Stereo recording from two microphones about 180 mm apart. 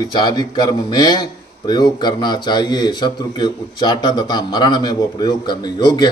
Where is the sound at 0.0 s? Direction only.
25° left (ahead or behind).